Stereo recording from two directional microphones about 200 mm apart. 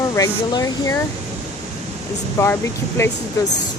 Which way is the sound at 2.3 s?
15° left (ahead or behind).